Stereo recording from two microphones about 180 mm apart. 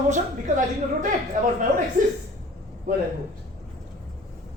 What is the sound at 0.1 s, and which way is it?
Speech, 45° right (ahead or behind).